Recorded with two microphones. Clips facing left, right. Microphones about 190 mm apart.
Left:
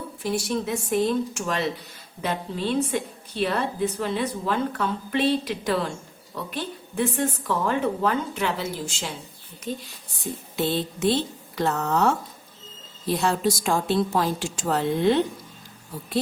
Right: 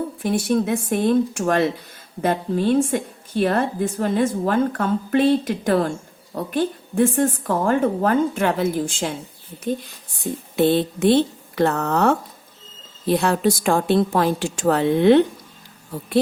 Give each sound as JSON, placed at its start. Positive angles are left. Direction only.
{"t": 0.2, "sound": "a woman's voice", "side_deg": -55}
{"t": 10.6, "sound": "a woman's voice", "side_deg": -55}